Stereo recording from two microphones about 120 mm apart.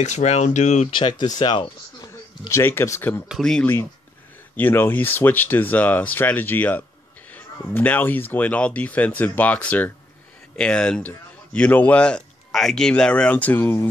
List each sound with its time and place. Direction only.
0.0 s speech: 70° left (ahead or behind)
0.9 s speech: 40° left (ahead or behind)
2.4 s speech: 20° left (ahead or behind)
3.3 s speech: centre (ahead or behind)
4.6 s speech: 15° left (ahead or behind)